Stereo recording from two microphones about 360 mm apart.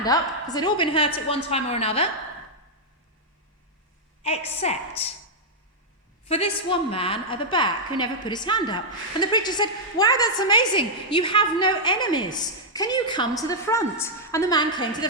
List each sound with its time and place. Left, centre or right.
0.0 s a woman's voice: centre
4.2 s a woman's voice: centre
6.2 s a woman's voice: centre